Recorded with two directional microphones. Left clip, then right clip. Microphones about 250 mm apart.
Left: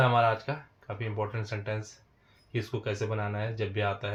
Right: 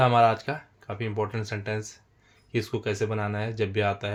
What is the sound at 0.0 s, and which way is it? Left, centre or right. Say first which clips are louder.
Speech: right 4 dB; right.